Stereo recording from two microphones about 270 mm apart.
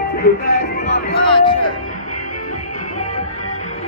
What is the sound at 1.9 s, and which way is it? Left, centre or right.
Music, left.